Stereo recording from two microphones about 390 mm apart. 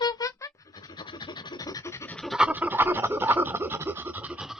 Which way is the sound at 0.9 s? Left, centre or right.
Centre.